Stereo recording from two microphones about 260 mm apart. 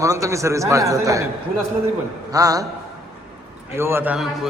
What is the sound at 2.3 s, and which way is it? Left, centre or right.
Speech, centre.